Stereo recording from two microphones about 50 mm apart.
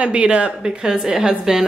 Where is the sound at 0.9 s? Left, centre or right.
Centre.